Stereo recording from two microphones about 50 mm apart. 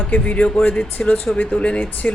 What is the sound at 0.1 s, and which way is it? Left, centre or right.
A man's voice, left.